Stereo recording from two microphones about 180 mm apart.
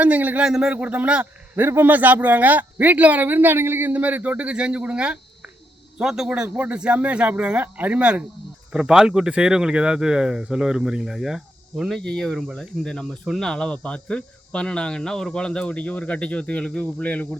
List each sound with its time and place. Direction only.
0.0 s speech: 10° right (ahead or behind); by 17.2 s 10° left (ahead or behind)